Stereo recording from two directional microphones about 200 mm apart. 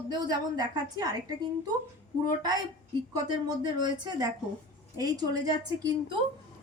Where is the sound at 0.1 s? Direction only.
20° right (ahead or behind).